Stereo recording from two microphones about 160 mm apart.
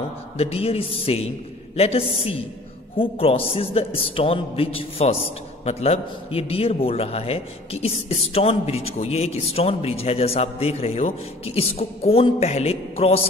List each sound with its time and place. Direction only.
0.4 s a man's voice: 40° left (ahead or behind)